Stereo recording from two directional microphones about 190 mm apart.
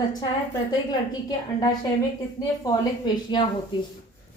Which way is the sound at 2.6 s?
20° left (ahead or behind).